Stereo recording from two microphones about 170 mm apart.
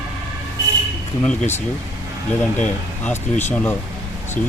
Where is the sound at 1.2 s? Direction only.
10° left (ahead or behind).